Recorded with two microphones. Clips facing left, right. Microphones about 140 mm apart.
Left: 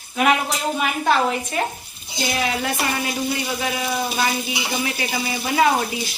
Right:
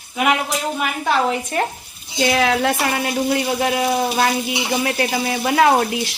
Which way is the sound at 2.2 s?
90° right.